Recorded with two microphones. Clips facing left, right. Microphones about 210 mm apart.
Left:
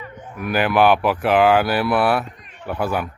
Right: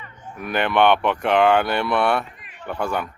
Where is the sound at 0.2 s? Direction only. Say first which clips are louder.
Right 1 dB; 60° left (ahead or behind).